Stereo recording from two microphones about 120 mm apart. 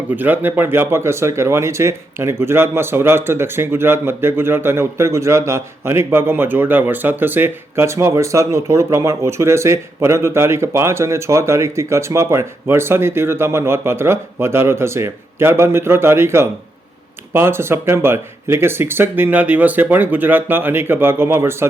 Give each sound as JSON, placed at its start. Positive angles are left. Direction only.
{"t": 0.2, "sound": "speech", "side_deg": -15}